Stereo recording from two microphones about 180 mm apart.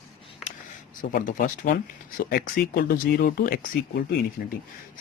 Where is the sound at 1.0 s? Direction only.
50° left (ahead or behind).